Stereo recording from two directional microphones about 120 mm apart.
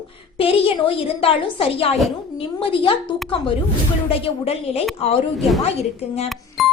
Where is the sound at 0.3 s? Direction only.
50° left (ahead or behind).